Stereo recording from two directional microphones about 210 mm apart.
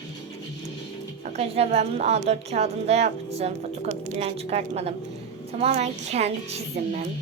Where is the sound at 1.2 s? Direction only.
30° right (ahead or behind).